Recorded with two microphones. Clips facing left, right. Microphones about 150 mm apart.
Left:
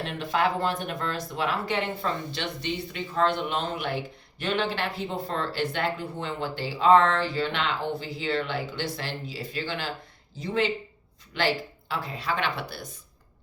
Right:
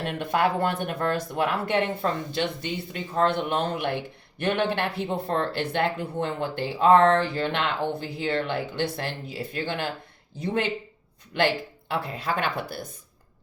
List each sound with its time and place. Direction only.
0.0 s speech: 55° right (ahead or behind)